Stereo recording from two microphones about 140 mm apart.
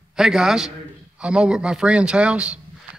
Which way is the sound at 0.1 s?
5° right (ahead or behind).